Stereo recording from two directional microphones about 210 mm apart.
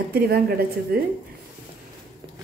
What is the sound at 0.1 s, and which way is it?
Speech, 45° right (ahead or behind).